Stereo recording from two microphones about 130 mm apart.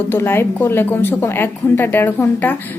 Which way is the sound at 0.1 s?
20° left (ahead or behind).